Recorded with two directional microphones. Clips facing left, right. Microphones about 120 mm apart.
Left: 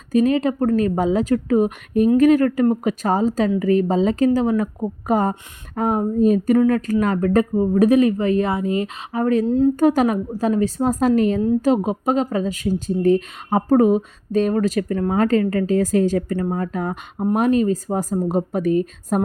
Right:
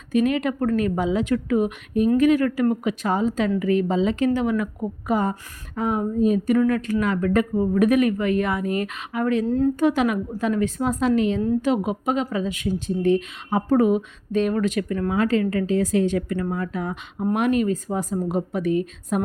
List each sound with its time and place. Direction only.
0.1 s speech: 35° left (ahead or behind)
7.5 s speech: 30° left (ahead or behind)